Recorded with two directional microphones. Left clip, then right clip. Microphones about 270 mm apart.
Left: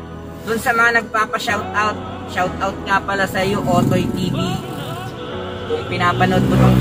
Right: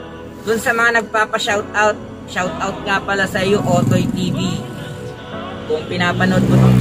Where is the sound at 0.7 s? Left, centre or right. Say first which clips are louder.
Left 1 dB; right.